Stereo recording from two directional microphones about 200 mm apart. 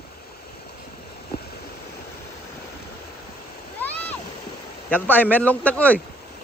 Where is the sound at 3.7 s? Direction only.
10° left (ahead or behind).